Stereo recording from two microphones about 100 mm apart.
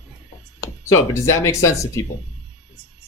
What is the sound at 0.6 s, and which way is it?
Speech, 35° left (ahead or behind).